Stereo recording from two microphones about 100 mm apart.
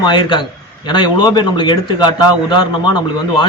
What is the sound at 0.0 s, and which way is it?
A man's voice, 50° left (ahead or behind).